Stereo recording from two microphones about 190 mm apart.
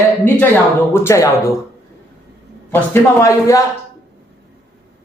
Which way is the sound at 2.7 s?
10° left (ahead or behind).